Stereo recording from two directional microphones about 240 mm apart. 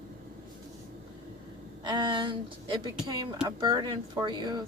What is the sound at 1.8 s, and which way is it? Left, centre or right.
A woman's voice, centre.